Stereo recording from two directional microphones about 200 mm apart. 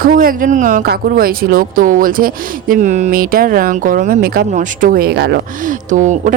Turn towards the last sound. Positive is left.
turn(degrees=-40)  # may be behind; listen again after turning